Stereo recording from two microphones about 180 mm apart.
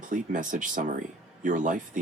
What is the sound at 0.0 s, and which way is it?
Speech, 45° right (ahead or behind).